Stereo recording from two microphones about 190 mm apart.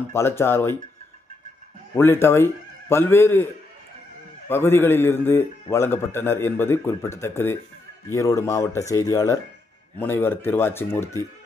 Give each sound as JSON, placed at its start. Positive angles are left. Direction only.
{"t": 0.1, "sound": "a man's voice", "side_deg": 15}
{"t": 2.0, "sound": "a man's voice", "side_deg": 15}
{"t": 4.5, "sound": "a man's voice", "side_deg": 10}